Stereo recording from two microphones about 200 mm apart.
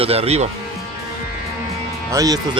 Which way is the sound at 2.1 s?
15° right (ahead or behind).